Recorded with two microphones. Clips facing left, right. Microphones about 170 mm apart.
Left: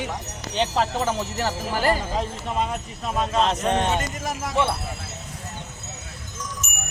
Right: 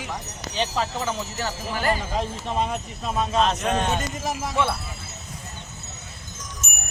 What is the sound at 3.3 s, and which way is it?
Speech, 30° left (ahead or behind).